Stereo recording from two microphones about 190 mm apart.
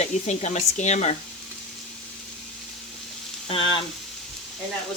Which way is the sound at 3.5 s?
25° left (ahead or behind).